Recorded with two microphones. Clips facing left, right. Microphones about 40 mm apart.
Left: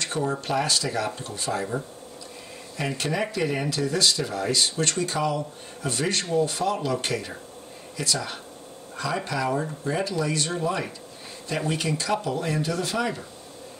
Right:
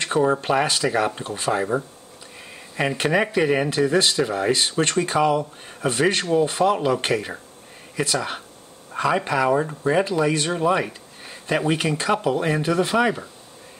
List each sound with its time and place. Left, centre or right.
0.0 s speech: right
3.0 s speech: right